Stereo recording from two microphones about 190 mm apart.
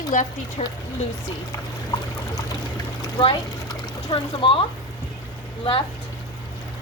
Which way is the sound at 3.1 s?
25° left (ahead or behind).